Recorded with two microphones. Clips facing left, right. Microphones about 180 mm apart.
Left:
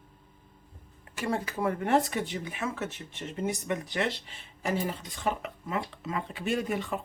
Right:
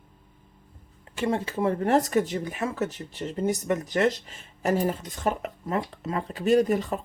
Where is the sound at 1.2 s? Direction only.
25° right (ahead or behind).